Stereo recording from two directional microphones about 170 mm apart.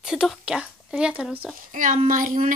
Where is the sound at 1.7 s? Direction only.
50° right (ahead or behind).